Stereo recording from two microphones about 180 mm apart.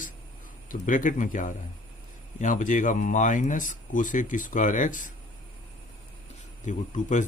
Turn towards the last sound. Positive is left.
turn(degrees=45)  # may be behind; listen again after turning